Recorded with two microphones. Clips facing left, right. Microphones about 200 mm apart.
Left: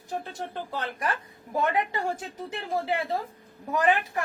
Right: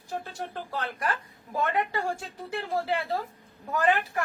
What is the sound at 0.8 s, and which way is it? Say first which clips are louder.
A woman's voice: even; 20° left (ahead or behind).